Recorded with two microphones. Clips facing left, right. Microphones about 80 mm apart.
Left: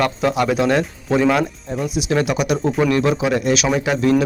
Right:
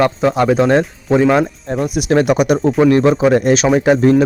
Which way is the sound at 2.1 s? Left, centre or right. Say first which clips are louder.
Right 7 dB; right.